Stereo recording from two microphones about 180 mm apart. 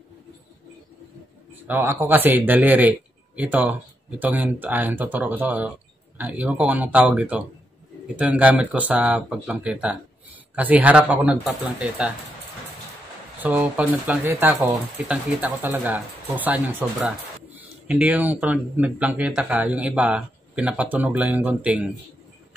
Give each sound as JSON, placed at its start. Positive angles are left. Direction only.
{"t": 1.7, "sound": "speech", "side_deg": -10}
{"t": 13.4, "sound": "speech", "side_deg": -10}